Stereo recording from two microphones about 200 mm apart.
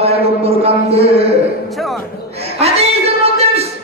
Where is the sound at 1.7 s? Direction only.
Centre (ahead or behind).